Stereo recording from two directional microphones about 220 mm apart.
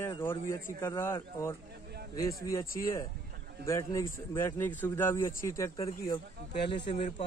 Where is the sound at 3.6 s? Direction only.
15° left (ahead or behind).